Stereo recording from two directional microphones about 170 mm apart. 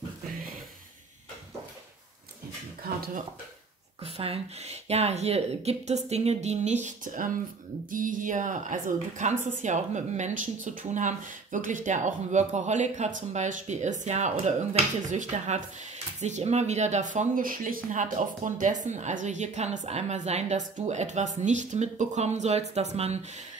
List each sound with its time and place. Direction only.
4.0 s a woman's voice: 35° right (ahead or behind)